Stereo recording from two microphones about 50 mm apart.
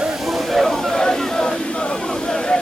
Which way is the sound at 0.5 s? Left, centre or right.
Centre.